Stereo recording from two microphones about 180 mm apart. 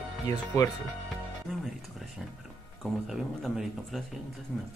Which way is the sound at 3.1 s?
Centre (ahead or behind).